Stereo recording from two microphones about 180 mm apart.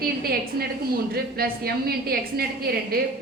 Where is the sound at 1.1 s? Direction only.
60° right (ahead or behind).